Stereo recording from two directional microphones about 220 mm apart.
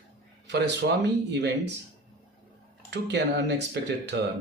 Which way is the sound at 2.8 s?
50° right (ahead or behind).